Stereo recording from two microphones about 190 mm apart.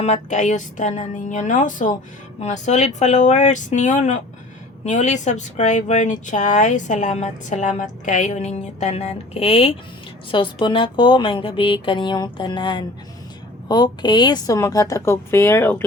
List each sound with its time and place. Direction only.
0.0 s a woman's voice: 40° left (ahead or behind); by 15.9 s 10° left (ahead or behind)